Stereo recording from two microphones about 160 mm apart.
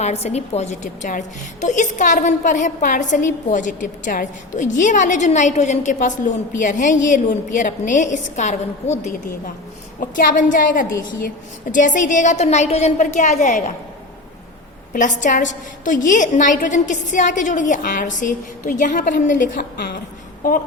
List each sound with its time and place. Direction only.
0.0 s a woman's voice: 45° left (ahead or behind)
14.9 s a woman's voice: 50° left (ahead or behind)